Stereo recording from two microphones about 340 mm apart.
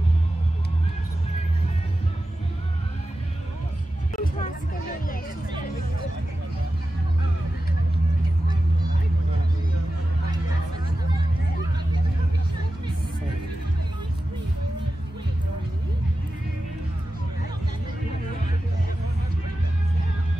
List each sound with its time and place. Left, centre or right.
4.1 s vehicle: left